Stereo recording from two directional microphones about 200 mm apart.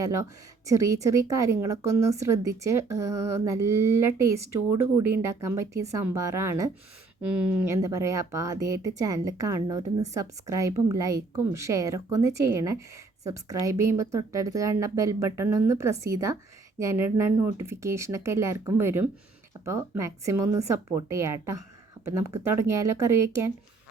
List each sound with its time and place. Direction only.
0.0 s speech: 15° right (ahead or behind)